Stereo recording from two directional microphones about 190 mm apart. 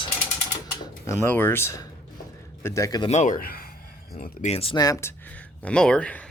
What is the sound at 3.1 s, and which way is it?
Speech, 40° left (ahead or behind).